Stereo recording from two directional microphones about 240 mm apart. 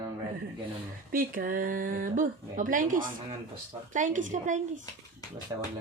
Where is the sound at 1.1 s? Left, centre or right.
Right.